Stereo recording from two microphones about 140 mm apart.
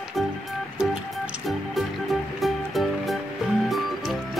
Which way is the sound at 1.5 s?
Centre (ahead or behind).